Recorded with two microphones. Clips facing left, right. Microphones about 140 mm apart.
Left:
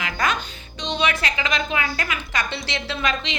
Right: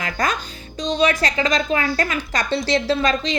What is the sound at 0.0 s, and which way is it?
A woman's voice, 35° right (ahead or behind).